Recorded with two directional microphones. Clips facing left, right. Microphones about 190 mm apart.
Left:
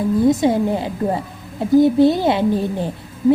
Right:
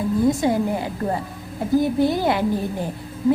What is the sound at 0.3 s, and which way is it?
A woman's voice, 20° left (ahead or behind).